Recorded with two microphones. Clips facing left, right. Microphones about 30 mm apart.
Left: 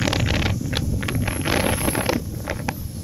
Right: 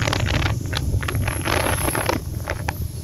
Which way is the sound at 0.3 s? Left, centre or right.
Centre.